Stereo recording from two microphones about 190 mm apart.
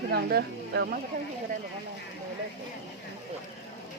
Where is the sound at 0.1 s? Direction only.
55° right (ahead or behind).